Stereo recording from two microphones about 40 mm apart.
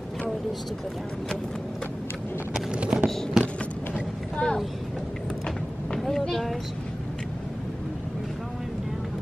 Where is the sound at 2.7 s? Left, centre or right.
Right.